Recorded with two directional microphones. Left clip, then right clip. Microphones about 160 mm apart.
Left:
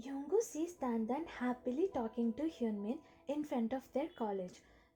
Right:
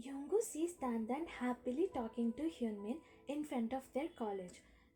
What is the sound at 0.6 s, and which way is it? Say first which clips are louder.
Speech: left 2 dB; 40° left (ahead or behind).